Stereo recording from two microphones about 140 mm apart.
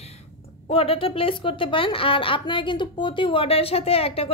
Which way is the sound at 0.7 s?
45° left (ahead or behind).